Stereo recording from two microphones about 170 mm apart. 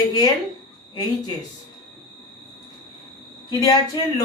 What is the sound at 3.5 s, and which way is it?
Speech, 25° left (ahead or behind).